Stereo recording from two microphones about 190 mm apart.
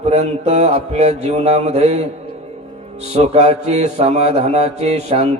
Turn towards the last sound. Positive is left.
turn(degrees=-35)  # may be behind; listen again after turning